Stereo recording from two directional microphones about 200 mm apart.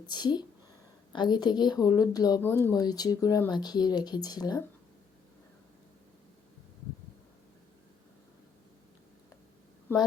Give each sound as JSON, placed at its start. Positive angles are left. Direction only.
{"t": 0.0, "sound": "speech", "side_deg": 20}